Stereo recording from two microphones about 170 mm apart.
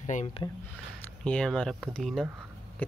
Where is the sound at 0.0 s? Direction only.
45° left (ahead or behind).